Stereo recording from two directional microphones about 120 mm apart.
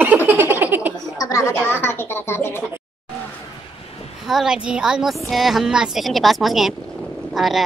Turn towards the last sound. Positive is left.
turn(degrees=0)  # may be behind; listen again after turning